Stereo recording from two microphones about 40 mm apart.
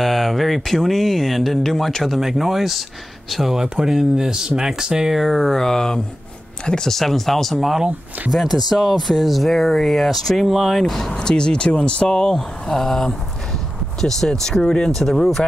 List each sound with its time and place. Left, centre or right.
0.0 s speech: centre
2.1 s speech: centre
3.5 s speech: centre
5.2 s speech: centre
6.9 s speech: centre; by 12.2 s left
12.2 s speech: centre